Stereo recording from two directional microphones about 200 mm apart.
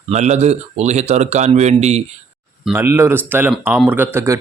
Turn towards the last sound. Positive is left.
turn(degrees=-15)  # may be behind; listen again after turning